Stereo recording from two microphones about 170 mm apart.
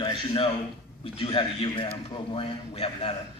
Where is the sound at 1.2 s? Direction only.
35° left (ahead or behind).